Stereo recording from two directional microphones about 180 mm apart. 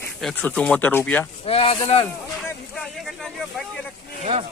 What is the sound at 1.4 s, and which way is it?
Speech, 35° left (ahead or behind).